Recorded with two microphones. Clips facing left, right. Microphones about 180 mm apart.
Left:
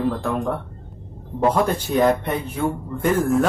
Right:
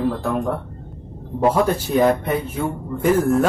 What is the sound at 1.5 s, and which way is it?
Speech, 5° right (ahead or behind).